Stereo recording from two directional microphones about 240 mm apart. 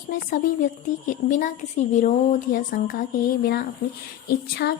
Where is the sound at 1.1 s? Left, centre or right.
Left.